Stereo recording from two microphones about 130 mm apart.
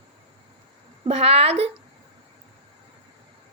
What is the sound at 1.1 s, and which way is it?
Speech, 55° right (ahead or behind).